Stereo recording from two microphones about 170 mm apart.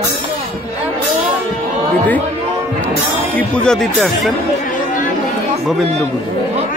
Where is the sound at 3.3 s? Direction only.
5° left (ahead or behind).